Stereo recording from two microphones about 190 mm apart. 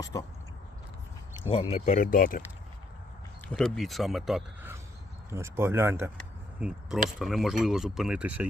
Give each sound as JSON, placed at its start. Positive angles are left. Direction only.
{"t": 0.0, "sound": "speech", "side_deg": 15}
{"t": 1.7, "sound": "speech", "side_deg": 40}
{"t": 3.5, "sound": "speech", "side_deg": 0}
{"t": 5.3, "sound": "speech", "side_deg": -15}
{"t": 6.1, "sound": "a sound", "side_deg": -5}
{"t": 7.2, "sound": "speech", "side_deg": 0}